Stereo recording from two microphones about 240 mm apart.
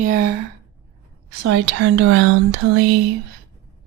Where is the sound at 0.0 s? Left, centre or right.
Right.